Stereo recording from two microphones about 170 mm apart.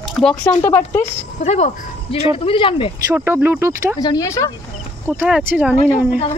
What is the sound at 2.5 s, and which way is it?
Speech, 30° left (ahead or behind).